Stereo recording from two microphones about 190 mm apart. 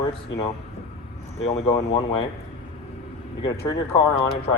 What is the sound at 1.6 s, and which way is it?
Speech, 30° left (ahead or behind).